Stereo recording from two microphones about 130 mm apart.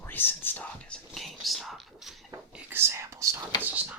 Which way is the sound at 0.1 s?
15° left (ahead or behind).